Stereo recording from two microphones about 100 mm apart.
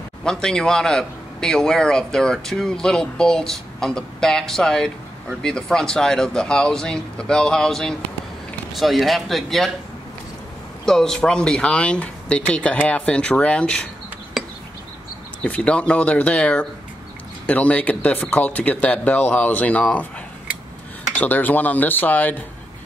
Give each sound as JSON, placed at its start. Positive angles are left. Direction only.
{"t": 0.2, "sound": "a man's voice", "side_deg": 10}
{"t": 10.9, "sound": "speech", "side_deg": 5}
{"t": 15.4, "sound": "speech", "side_deg": 10}
{"t": 21.1, "sound": "speech", "side_deg": 15}